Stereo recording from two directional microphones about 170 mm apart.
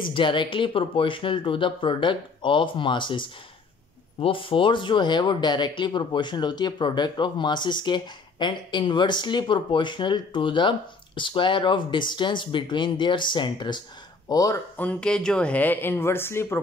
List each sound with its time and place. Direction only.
0.0 s speech: 30° left (ahead or behind)
14.8 s speech: 5° left (ahead or behind)